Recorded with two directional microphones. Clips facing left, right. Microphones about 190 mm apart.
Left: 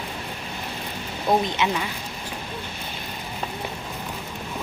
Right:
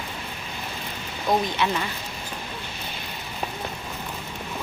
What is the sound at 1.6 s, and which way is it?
Speech, 20° left (ahead or behind).